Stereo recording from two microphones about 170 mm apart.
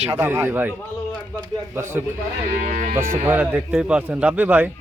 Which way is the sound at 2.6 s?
45° right (ahead or behind).